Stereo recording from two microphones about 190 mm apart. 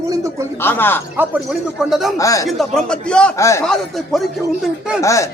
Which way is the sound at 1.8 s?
Centre (ahead or behind).